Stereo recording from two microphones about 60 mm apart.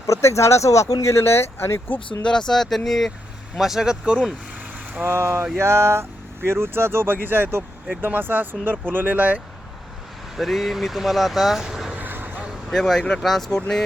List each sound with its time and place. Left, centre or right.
0.0 s speech: left
2.2 s speech: centre
5.0 s speech: right
10.3 s speech: centre
11.6 s a sound: centre
11.9 s vehicle: right
12.7 s speech: centre